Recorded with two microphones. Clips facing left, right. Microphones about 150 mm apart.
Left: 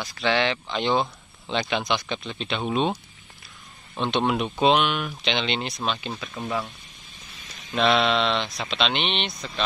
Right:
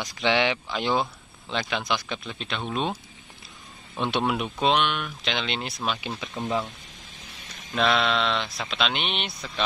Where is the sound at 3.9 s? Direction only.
10° right (ahead or behind).